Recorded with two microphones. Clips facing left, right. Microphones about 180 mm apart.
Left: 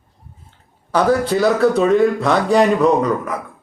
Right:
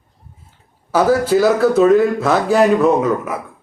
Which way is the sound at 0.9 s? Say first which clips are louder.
Right 2 dB; 5° right (ahead or behind).